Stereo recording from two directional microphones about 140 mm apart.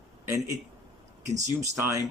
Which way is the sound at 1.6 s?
20° right (ahead or behind).